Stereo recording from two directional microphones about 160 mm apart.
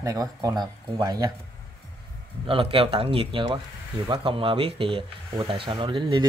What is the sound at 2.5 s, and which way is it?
Speech, 35° right (ahead or behind).